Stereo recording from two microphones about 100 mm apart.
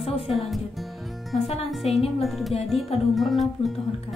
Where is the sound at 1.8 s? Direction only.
90° left.